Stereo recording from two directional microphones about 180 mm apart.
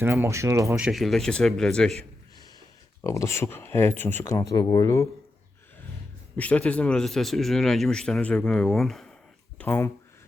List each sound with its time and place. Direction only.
0.0 s speech: 15° right (ahead or behind)
0.8 s a man's voice: centre (ahead or behind)
3.0 s speech: 15° left (ahead or behind)
6.3 s a man's voice: 5° left (ahead or behind)
9.6 s speech: 15° left (ahead or behind)